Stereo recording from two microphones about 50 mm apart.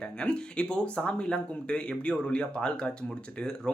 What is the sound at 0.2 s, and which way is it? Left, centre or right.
Speech, centre.